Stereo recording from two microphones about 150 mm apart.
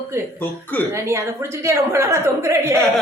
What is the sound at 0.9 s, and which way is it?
A woman's voice, 20° right (ahead or behind).